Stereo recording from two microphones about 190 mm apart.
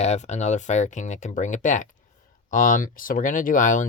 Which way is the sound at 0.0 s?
35° left (ahead or behind).